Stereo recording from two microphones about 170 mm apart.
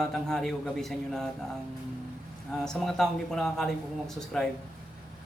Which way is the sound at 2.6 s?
5° left (ahead or behind).